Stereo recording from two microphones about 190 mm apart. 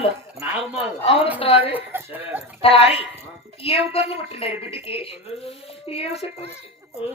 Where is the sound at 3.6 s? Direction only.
30° left (ahead or behind).